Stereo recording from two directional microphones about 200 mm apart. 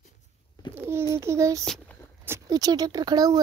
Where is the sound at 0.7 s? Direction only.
15° right (ahead or behind).